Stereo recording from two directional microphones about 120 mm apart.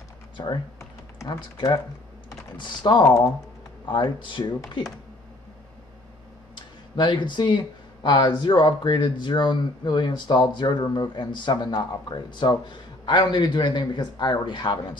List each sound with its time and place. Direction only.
0.7 s typing: 30° left (ahead or behind)
2.5 s speech: 40° left (ahead or behind)
4.2 s speech: 40° left (ahead or behind)
6.5 s speech: 40° left (ahead or behind)